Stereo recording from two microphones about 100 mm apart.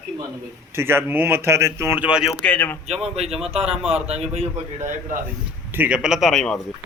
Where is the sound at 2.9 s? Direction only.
90° right.